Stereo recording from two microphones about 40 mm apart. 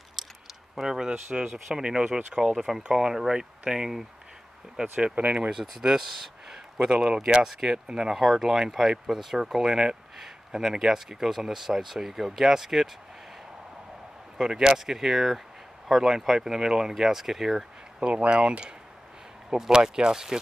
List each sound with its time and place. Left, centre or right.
0.8 s speech: centre
4.9 s speech: right
5.5 s speech: centre
8.1 s speech: centre
14.4 s speech: centre
18.0 s speech: right